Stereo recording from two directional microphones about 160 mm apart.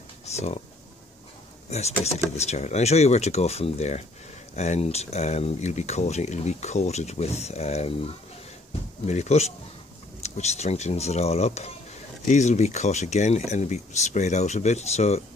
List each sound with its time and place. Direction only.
0.2 s speech: 45° left (ahead or behind)
1.7 s speech: 45° left (ahead or behind)